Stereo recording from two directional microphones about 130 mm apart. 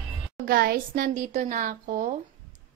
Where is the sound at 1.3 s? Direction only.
75° right (ahead or behind).